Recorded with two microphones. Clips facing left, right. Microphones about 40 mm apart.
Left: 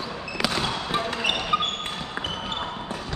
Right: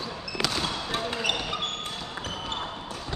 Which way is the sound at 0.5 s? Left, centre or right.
Left.